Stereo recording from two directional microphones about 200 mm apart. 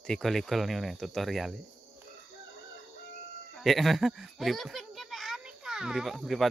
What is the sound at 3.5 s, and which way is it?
A child's voice, centre (ahead or behind).